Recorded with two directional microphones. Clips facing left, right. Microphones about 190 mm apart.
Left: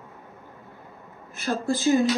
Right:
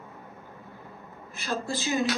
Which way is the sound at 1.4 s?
50° left (ahead or behind).